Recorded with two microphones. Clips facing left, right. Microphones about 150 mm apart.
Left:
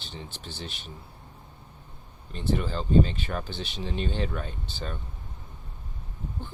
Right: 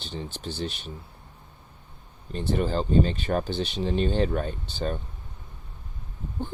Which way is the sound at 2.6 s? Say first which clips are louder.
Right 1 dB; 40° right (ahead or behind).